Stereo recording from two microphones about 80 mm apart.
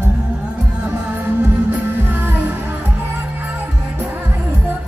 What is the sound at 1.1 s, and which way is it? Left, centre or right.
Music, right.